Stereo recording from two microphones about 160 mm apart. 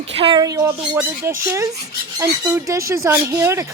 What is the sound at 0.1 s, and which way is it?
Speech, 35° right (ahead or behind).